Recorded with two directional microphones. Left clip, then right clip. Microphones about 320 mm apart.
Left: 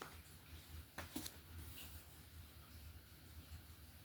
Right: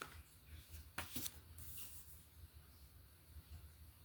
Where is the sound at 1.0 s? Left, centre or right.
Right.